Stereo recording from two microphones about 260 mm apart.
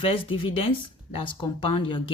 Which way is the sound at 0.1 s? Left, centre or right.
Left.